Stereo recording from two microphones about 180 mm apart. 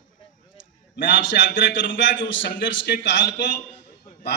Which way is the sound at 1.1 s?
90° left.